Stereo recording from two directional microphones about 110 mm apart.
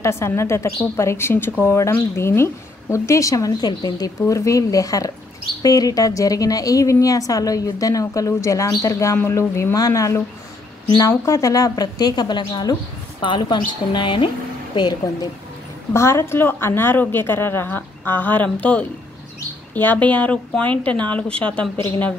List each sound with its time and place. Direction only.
0.0 s a woman's voice: 25° left (ahead or behind); by 15.0 s 45° left (ahead or behind)
15.9 s a woman's voice: 25° left (ahead or behind)